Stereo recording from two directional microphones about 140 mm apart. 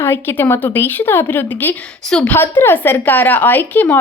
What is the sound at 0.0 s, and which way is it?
A woman's voice, 15° left (ahead or behind).